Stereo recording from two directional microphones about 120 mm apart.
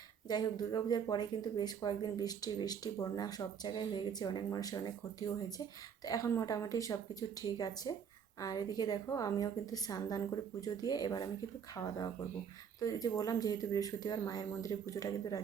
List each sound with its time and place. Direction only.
0.3 s a woman's voice: 35° left (ahead or behind)